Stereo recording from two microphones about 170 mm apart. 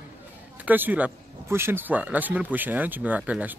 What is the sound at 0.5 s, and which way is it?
Speech, 10° right (ahead or behind).